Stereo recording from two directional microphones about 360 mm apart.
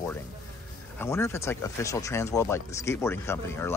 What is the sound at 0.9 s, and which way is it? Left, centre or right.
Speech, centre.